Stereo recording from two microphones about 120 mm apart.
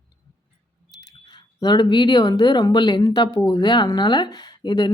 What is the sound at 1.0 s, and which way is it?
Speech, 35° left (ahead or behind).